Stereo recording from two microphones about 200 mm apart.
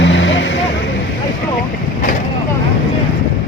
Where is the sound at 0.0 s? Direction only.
70° left (ahead or behind).